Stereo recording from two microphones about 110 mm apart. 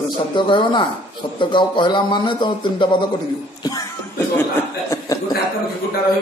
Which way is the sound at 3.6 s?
35° left (ahead or behind).